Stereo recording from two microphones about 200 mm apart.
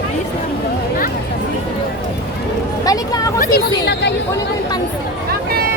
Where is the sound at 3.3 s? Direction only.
45° left (ahead or behind).